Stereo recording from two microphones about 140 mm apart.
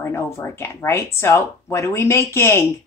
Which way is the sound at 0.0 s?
20° left (ahead or behind).